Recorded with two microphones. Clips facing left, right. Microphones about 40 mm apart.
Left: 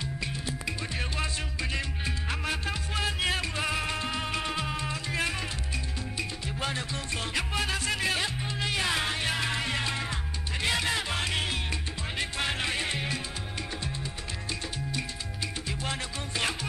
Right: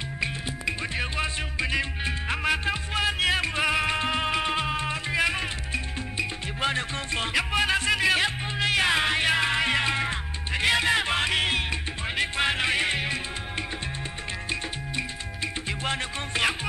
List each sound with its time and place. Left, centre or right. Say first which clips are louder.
0.2 s music: right 8 dB; right